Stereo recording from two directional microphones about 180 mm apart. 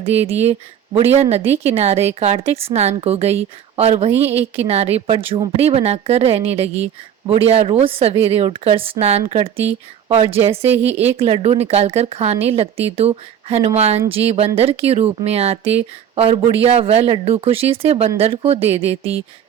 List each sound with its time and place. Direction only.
0.0 s speech: 35° right (ahead or behind)
4.1 s speech: 15° right (ahead or behind)
4.5 s speech: 35° right (ahead or behind)